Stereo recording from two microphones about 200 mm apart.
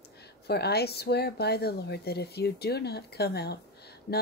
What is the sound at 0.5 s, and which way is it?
Speech, 55° left (ahead or behind).